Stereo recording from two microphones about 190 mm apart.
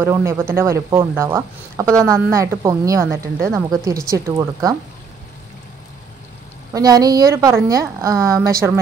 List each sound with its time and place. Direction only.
0.0 s speech: 15° right (ahead or behind)
6.7 s speech: 20° right (ahead or behind)